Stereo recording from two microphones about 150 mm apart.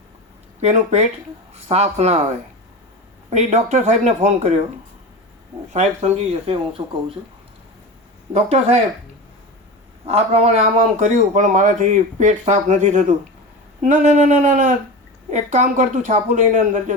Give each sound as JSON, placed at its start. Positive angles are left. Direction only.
{"t": 0.6, "sound": "speech", "side_deg": -45}
{"t": 3.2, "sound": "speech", "side_deg": -50}
{"t": 5.7, "sound": "speech", "side_deg": -45}
{"t": 8.3, "sound": "speech", "side_deg": -45}
{"t": 10.1, "sound": "speech", "side_deg": -45}